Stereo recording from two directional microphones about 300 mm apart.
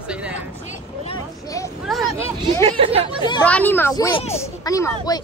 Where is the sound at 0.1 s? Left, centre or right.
Centre.